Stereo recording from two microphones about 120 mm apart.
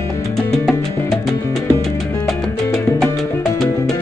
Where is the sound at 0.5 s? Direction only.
5° left (ahead or behind).